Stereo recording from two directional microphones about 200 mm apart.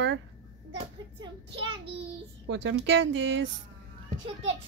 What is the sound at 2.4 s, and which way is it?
Speech, 65° right (ahead or behind).